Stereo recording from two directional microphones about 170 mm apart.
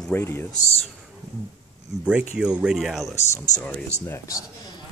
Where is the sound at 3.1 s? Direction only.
15° left (ahead or behind).